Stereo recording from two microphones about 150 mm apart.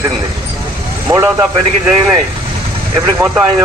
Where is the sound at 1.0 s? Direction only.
20° right (ahead or behind).